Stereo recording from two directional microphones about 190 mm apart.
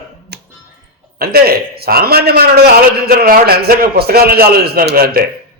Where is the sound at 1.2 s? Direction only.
55° right (ahead or behind).